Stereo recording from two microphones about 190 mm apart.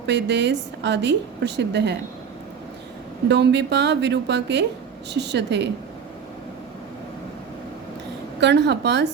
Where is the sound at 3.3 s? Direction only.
65° right (ahead or behind).